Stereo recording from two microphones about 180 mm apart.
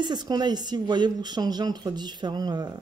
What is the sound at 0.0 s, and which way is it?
Speech, 25° right (ahead or behind).